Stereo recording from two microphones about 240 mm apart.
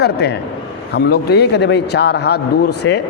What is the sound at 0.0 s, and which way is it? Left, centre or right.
A man's voice, left.